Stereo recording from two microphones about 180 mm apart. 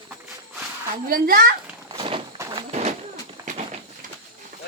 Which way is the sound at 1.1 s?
55° right (ahead or behind).